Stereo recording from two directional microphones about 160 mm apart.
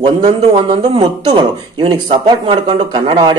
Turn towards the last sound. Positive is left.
turn(degrees=-30)  # may be behind; listen again after turning